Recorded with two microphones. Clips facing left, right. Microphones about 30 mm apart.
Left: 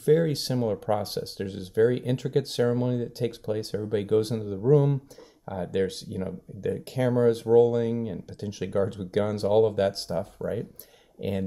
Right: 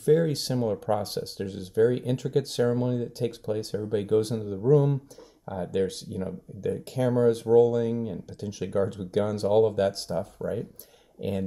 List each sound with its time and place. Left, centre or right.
0.0 s speech: centre